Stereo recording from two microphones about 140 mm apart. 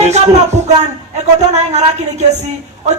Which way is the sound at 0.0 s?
55° right (ahead or behind).